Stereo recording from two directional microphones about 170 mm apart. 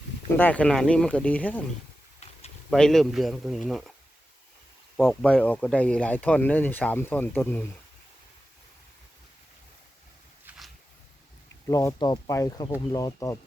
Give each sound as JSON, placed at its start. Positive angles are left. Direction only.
{"t": 0.3, "sound": "speech", "side_deg": 10}
{"t": 2.6, "sound": "speech", "side_deg": 5}
{"t": 4.9, "sound": "speech", "side_deg": 5}
{"t": 11.7, "sound": "speech", "side_deg": 20}